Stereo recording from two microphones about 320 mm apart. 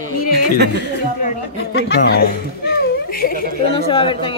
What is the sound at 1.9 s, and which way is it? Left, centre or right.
A child's voice, left.